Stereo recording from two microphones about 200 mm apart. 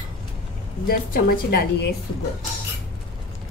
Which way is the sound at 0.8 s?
45° left (ahead or behind).